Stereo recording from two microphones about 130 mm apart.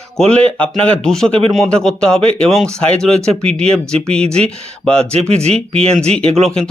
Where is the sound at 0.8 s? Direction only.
5° left (ahead or behind).